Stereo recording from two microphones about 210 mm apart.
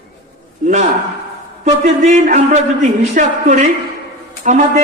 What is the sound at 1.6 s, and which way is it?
A man's voice, 35° right (ahead or behind).